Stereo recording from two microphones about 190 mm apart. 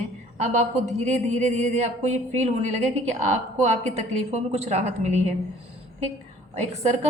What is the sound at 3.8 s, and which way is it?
A woman's voice, 35° right (ahead or behind).